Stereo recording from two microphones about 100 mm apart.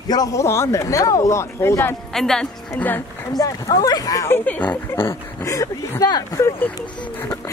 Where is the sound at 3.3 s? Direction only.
40° left (ahead or behind).